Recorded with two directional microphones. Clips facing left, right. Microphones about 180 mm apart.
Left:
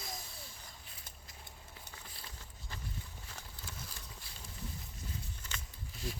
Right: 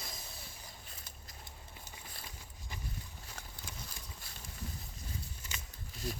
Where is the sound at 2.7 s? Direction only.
15° right (ahead or behind).